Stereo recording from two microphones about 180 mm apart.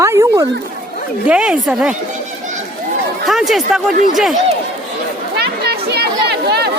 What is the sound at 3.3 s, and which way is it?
Speech, centre (ahead or behind).